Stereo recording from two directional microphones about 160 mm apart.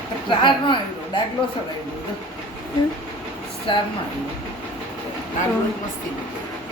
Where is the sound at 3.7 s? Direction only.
30° left (ahead or behind).